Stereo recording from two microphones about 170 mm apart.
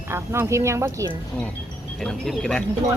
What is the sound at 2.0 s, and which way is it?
Speech, centre (ahead or behind).